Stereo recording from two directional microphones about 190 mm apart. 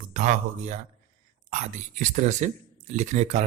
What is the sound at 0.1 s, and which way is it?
Speech, 40° right (ahead or behind).